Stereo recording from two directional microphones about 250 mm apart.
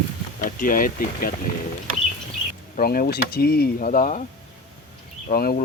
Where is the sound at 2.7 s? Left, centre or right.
Left.